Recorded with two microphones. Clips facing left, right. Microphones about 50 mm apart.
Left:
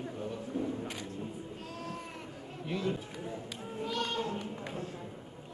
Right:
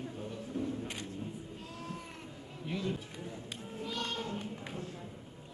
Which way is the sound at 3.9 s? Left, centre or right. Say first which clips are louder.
Left 4 dB; centre.